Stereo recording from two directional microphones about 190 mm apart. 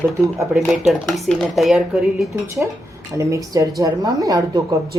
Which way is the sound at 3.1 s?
15° right (ahead or behind).